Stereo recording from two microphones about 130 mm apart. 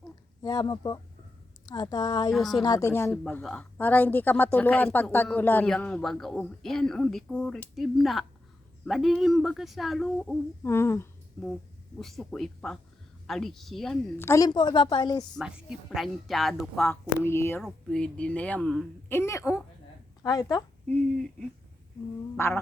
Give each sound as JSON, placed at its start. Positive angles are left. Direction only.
{"t": 0.4, "sound": "a woman's voice", "side_deg": 30}
{"t": 2.3, "sound": "a woman's voice", "side_deg": 0}
{"t": 2.6, "sound": "speech", "side_deg": 25}
{"t": 3.4, "sound": "a woman's voice", "side_deg": 10}
{"t": 10.6, "sound": "speech", "side_deg": 20}
{"t": 11.9, "sound": "a woman's voice", "side_deg": 0}
{"t": 14.2, "sound": "a woman's voice", "side_deg": 25}
{"t": 15.4, "sound": "a woman's voice", "side_deg": -5}
{"t": 17.2, "sound": "speech", "side_deg": 20}
{"t": 17.6, "sound": "speech", "side_deg": 5}
{"t": 19.0, "sound": "a woman's voice", "side_deg": 20}
{"t": 20.8, "sound": "speech", "side_deg": 5}
{"t": 22.4, "sound": "speech", "side_deg": 20}